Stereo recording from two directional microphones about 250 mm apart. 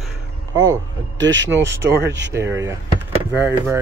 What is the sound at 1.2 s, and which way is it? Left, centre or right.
Speech, right.